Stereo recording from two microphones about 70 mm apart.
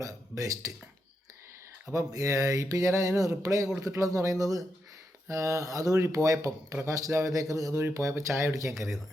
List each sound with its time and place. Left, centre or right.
0.0 s speech: right
1.9 s speech: right